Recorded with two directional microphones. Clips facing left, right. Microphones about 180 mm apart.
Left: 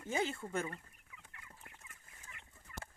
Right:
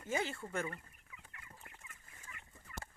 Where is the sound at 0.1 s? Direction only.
15° left (ahead or behind).